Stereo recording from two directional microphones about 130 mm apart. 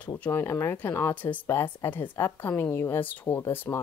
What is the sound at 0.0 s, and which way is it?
Speech, 15° left (ahead or behind).